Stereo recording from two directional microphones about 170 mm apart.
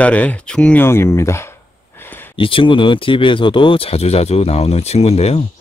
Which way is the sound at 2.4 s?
30° left (ahead or behind).